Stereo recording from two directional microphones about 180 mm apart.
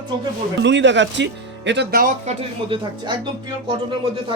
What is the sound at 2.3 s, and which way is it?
Speech, 30° right (ahead or behind).